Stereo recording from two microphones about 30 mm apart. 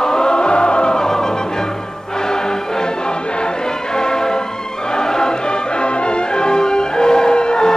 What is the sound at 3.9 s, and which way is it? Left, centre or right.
Music, left.